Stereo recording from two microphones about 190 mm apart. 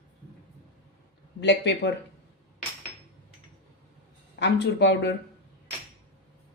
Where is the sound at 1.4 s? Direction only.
65° left (ahead or behind).